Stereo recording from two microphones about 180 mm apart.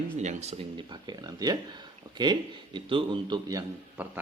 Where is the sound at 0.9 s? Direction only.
20° right (ahead or behind).